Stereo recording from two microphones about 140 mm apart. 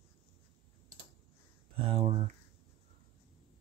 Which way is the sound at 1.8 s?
45° right (ahead or behind).